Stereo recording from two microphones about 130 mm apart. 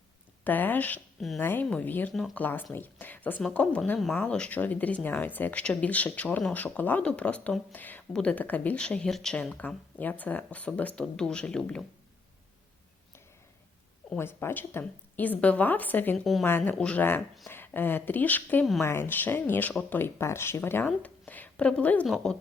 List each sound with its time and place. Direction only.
0.4 s speech: 15° left (ahead or behind)
14.2 s speech: 20° left (ahead or behind)
16.1 s a woman's voice: centre (ahead or behind)
16.4 s a woman's voice: 15° left (ahead or behind)